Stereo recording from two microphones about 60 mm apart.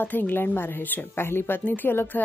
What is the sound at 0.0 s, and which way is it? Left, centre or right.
Speech, left.